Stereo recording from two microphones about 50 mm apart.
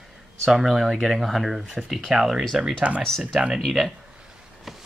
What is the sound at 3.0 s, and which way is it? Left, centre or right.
Speech, centre.